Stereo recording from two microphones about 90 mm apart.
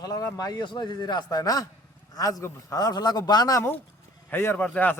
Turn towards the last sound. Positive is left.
turn(degrees=20)  # may be behind; listen again after turning